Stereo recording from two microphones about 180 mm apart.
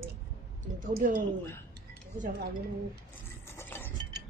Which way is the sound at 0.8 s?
45° right (ahead or behind).